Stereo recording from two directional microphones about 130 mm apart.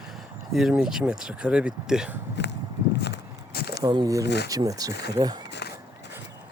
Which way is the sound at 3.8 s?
30° right (ahead or behind).